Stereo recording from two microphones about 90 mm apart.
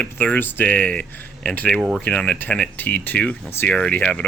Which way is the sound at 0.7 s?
10° left (ahead or behind).